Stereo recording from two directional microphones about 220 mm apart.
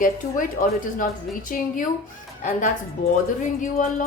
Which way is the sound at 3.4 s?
35° left (ahead or behind).